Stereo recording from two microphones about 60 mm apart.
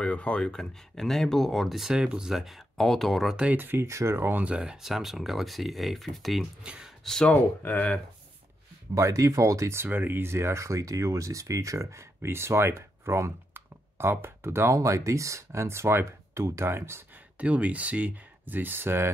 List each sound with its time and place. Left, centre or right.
0.0 s speech: centre
3.5 s speech: right
3.8 s speech: right
4.4 s speech: centre
4.8 s speech: centre
6.6 s speech: centre
7.2 s speech: left
8.9 s speech: right
9.8 s speech: right
13.5 s computer keyboard: right
14.8 s speech: right
17.4 s speech: right